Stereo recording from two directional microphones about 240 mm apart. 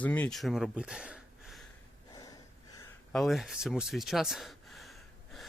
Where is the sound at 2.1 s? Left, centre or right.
Centre.